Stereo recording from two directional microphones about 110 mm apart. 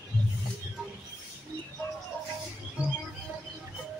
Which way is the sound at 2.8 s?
5° right (ahead or behind).